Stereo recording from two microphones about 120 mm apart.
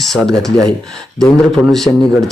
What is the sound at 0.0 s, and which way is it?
Speech, centre (ahead or behind).